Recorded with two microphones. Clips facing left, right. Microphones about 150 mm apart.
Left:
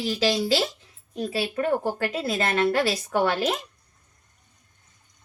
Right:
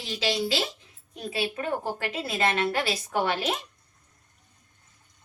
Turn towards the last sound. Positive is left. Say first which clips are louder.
# left 4 dB
turn(degrees=45)  # may be behind; listen again after turning